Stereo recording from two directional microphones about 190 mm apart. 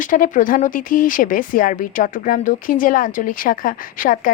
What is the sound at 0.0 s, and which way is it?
Speech, 45° left (ahead or behind).